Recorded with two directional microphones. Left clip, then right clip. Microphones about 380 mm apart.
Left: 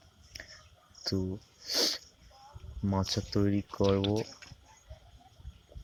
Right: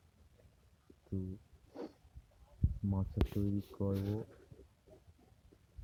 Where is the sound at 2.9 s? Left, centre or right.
Centre.